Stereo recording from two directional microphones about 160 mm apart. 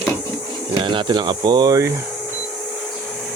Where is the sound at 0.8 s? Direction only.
30° right (ahead or behind).